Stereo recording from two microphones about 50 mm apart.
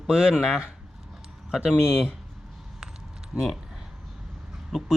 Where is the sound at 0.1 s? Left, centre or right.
Centre.